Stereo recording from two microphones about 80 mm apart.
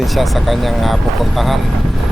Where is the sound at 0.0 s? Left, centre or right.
Centre.